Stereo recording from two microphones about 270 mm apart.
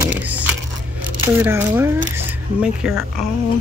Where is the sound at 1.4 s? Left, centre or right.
Centre.